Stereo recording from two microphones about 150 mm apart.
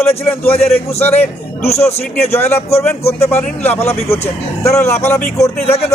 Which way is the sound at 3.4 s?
10° left (ahead or behind).